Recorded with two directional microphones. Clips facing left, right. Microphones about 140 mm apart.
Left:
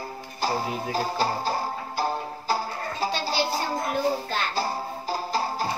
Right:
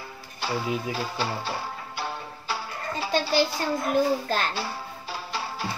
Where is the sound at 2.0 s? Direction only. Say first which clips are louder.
Left 7 dB; 40° left (ahead or behind).